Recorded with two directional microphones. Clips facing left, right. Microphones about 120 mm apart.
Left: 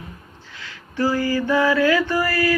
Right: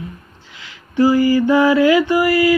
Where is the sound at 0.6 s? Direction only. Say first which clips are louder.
Right 8 dB; 15° right (ahead or behind).